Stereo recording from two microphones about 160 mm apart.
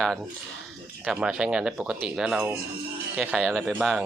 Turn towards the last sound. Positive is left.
turn(degrees=0)  # may be behind; listen again after turning